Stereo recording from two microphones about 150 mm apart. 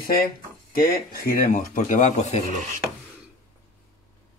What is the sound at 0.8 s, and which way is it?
Speech, 70° left (ahead or behind).